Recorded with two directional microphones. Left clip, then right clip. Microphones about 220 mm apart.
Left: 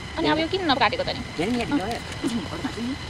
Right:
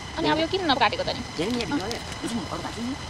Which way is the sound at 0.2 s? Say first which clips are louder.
Left 1 dB; 20° right (ahead or behind).